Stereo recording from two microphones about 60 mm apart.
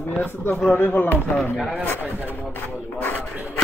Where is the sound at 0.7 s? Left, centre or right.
Left.